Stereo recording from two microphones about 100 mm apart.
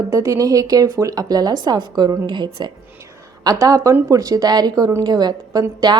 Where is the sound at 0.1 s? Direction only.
35° right (ahead or behind); by 2.7 s 50° right (ahead or behind).